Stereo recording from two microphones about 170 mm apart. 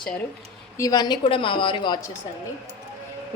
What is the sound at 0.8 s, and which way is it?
A woman's voice, 25° left (ahead or behind).